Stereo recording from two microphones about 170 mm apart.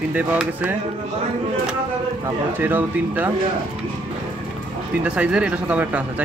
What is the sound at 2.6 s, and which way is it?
Speech, 10° right (ahead or behind).